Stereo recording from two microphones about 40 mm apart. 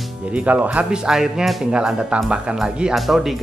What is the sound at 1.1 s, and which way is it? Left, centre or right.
Speech, centre.